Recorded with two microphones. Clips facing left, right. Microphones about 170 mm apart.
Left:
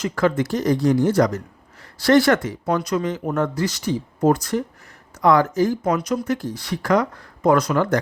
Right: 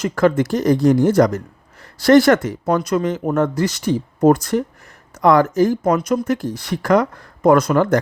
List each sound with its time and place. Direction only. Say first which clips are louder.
0.0 s speech: right 4 dB; 50° right (ahead or behind)